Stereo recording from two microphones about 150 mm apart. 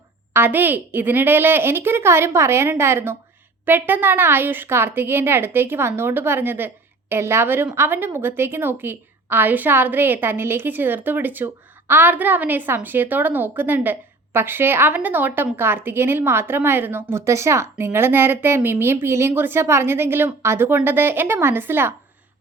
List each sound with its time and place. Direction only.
0.3 s a woman's voice: 15° right (ahead or behind)